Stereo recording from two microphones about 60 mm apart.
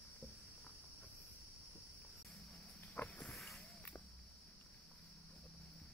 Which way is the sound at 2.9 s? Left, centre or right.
Left.